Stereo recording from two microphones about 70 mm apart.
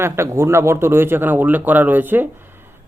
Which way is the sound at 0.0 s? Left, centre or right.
Right.